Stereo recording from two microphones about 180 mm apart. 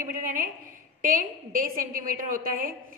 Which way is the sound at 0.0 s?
50° right (ahead or behind).